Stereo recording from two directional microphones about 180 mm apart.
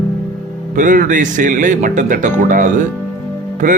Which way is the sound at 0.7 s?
45° right (ahead or behind).